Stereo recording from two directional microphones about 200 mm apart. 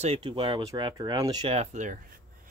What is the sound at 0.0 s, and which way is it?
Speech, 30° right (ahead or behind).